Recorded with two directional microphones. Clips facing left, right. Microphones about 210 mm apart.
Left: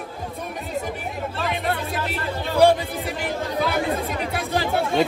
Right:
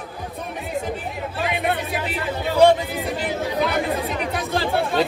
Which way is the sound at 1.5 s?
15° right (ahead or behind).